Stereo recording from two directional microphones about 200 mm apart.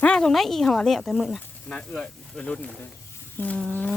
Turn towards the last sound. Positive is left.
turn(degrees=5)  # may be behind; listen again after turning